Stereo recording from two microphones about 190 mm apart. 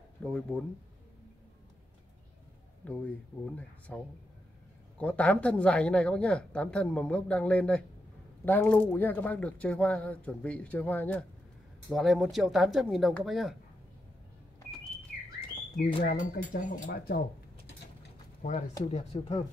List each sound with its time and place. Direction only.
0.2 s speech: 5° left (ahead or behind)
2.8 s speech: 5° left (ahead or behind)
16.0 s speech: 45° left (ahead or behind)
18.4 s speech: 40° left (ahead or behind)
19.1 s speech: 25° left (ahead or behind)